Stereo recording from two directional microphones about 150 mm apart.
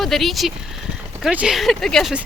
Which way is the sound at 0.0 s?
Centre (ahead or behind).